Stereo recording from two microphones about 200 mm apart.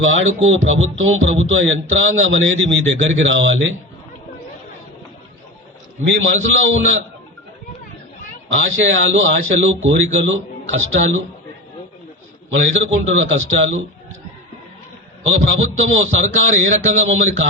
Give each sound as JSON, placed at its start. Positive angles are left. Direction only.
{"t": 0.0, "sound": "speech", "side_deg": -75}
{"t": 6.1, "sound": "speech", "side_deg": -70}
{"t": 8.8, "sound": "speech", "side_deg": -70}
{"t": 12.5, "sound": "speech", "side_deg": -70}
{"t": 15.4, "sound": "speech", "side_deg": -75}